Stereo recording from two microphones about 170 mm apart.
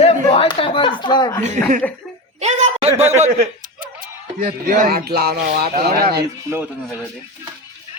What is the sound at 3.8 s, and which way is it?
Speech, 55° right (ahead or behind).